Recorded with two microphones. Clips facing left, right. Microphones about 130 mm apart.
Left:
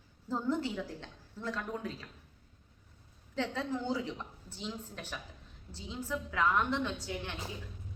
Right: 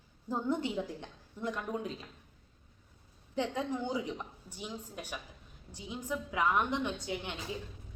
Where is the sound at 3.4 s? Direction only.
15° right (ahead or behind).